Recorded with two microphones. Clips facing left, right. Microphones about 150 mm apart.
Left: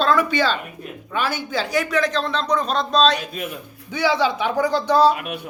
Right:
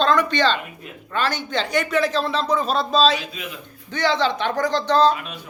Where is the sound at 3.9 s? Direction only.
10° left (ahead or behind).